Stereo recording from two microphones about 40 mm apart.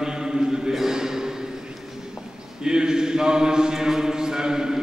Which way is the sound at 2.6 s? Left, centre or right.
Centre.